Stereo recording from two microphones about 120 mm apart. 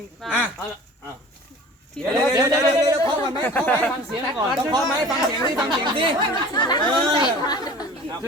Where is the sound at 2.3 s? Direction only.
30° right (ahead or behind).